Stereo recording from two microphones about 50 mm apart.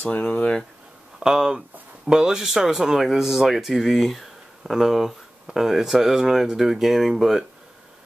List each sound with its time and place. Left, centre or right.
0.0 s speech: left
1.2 s speech: centre